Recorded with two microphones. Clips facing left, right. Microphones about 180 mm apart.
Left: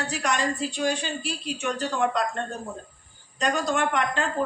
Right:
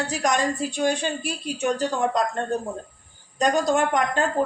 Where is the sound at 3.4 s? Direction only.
40° right (ahead or behind).